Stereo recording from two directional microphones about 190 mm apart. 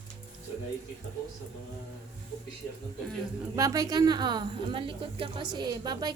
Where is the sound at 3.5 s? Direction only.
20° right (ahead or behind).